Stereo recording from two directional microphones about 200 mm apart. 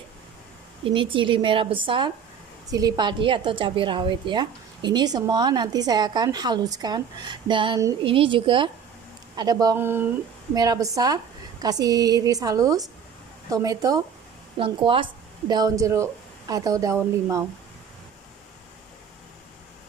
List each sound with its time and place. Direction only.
0.8 s a woman's voice: 25° right (ahead or behind)